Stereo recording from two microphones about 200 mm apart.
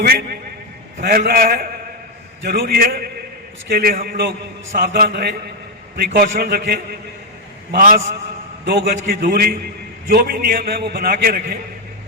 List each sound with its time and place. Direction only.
0.0 s a man's voice: 50° right (ahead or behind)